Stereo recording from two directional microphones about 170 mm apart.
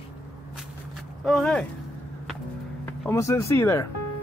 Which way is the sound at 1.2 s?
5° left (ahead or behind).